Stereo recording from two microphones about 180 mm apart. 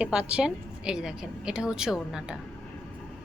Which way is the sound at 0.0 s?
5° right (ahead or behind).